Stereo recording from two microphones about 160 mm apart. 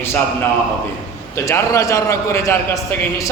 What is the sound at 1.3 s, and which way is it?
A man's voice, 20° left (ahead or behind).